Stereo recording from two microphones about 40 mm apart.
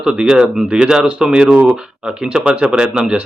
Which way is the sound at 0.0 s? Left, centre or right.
Right.